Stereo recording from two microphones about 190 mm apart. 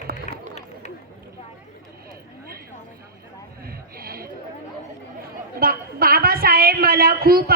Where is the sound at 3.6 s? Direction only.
50° right (ahead or behind).